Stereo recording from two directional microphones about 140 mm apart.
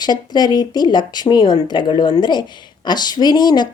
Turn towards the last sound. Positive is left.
turn(degrees=30)  # may be behind; listen again after turning